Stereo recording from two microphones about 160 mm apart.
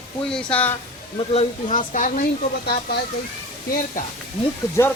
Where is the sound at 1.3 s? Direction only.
45° left (ahead or behind).